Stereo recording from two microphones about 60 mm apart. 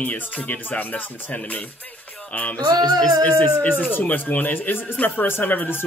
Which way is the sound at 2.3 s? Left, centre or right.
Left.